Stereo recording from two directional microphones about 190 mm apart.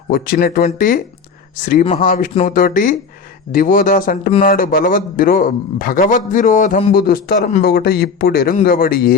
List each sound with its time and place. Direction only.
0.1 s a man's voice: 50° left (ahead or behind)